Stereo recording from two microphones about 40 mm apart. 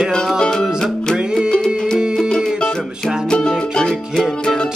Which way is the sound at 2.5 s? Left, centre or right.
Left.